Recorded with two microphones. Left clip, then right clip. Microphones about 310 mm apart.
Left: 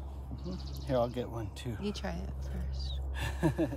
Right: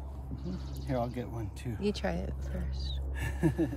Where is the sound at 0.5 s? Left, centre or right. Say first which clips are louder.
Left 3 dB; centre.